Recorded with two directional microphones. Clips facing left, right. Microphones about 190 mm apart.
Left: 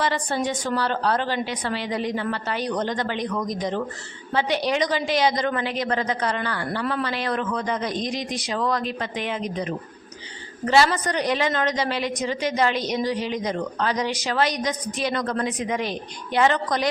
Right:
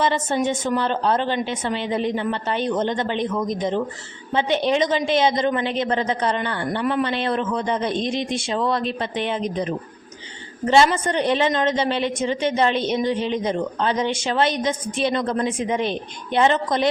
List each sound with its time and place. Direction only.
0.0 s a woman's voice: 20° right (ahead or behind)
10.7 s a woman's voice: 25° right (ahead or behind)